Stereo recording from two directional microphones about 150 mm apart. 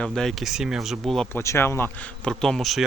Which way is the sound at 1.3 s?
15° left (ahead or behind).